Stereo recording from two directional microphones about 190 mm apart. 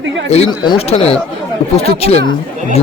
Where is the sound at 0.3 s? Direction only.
30° left (ahead or behind).